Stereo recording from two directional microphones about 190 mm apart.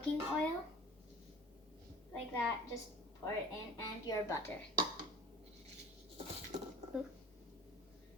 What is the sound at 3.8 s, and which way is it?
Speech, 20° left (ahead or behind).